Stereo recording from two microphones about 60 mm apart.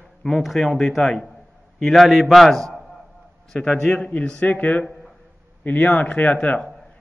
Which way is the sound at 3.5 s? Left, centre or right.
Centre.